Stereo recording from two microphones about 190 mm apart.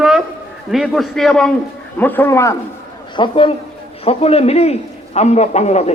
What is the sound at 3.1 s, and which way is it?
A man's voice, 25° left (ahead or behind).